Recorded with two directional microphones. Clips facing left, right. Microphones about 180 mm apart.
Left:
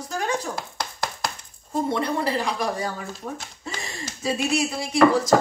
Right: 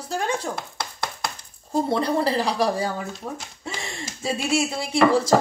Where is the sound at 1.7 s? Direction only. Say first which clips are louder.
Right 2 dB; 35° right (ahead or behind).